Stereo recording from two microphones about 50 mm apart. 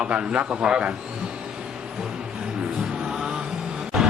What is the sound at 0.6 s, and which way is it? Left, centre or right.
Speech, centre.